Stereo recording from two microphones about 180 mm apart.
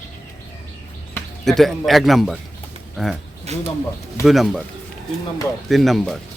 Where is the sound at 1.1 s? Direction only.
Centre (ahead or behind).